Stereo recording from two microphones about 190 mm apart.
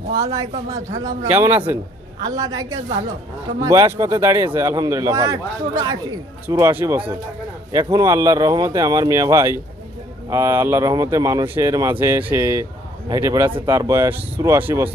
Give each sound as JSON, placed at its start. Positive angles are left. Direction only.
{"t": 0.2, "sound": "a woman's voice", "side_deg": -15}